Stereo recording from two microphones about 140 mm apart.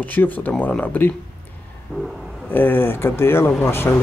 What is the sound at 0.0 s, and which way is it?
Speech, 10° left (ahead or behind).